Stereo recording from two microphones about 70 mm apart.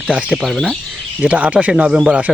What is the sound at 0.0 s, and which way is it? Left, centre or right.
Speech, centre.